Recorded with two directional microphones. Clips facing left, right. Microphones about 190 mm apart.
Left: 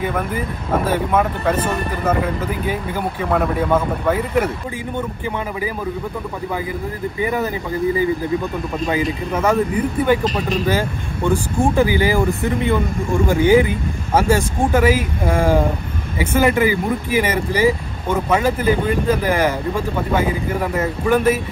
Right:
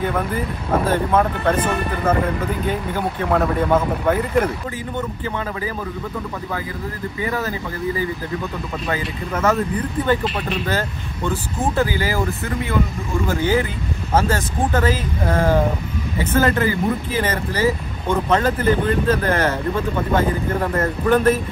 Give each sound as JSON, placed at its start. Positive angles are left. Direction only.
{"t": 0.0, "sound": "speech", "side_deg": 5}
{"t": 7.2, "sound": "speech", "side_deg": 20}
{"t": 8.8, "sound": "speech", "side_deg": 15}